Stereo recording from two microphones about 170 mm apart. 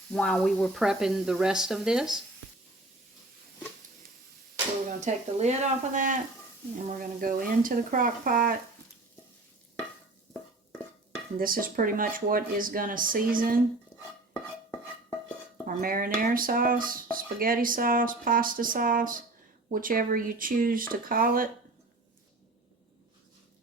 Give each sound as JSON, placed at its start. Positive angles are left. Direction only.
{"t": 0.1, "sound": "speech", "side_deg": 5}
{"t": 4.9, "sound": "speech", "side_deg": -45}
{"t": 11.3, "sound": "speech", "side_deg": -55}
{"t": 15.6, "sound": "speech", "side_deg": -55}